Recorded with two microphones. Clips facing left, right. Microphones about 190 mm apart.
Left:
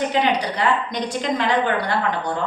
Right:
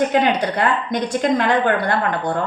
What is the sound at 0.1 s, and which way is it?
A woman's voice, 50° right (ahead or behind).